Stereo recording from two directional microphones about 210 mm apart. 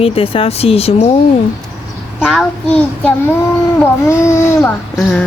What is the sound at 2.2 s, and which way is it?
A child's voice, 5° left (ahead or behind).